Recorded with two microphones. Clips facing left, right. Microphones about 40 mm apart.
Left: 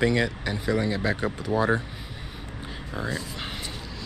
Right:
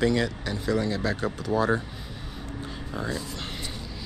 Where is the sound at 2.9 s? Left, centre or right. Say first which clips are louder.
Left 1 dB; centre.